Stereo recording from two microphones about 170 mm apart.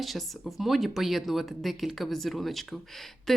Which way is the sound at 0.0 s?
Centre (ahead or behind).